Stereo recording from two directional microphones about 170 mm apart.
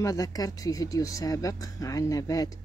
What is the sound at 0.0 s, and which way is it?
Speech, 20° left (ahead or behind).